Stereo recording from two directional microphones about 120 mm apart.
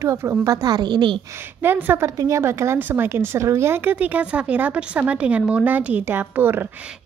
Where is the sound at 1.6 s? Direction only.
20° right (ahead or behind).